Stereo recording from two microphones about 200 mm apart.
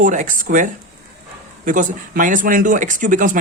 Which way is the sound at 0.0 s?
40° right (ahead or behind).